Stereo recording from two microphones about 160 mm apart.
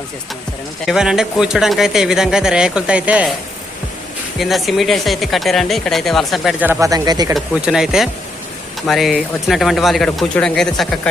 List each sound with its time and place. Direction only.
0.9 s speech: 5° right (ahead or behind)
4.4 s speech: centre (ahead or behind)
6.7 s speech: 20° right (ahead or behind)
7.3 s speech: 5° right (ahead or behind)